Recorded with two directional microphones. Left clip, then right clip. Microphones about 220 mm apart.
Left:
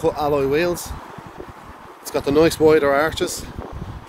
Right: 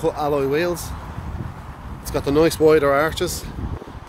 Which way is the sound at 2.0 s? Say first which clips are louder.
Left 1 dB; 5° left (ahead or behind).